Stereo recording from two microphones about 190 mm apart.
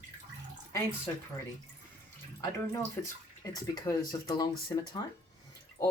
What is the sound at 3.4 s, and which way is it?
Speech, 20° left (ahead or behind).